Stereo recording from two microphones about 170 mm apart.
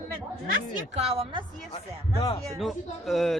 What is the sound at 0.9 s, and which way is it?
Speech, 35° right (ahead or behind).